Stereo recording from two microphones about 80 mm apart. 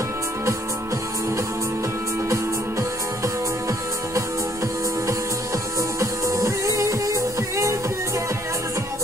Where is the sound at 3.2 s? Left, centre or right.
Right.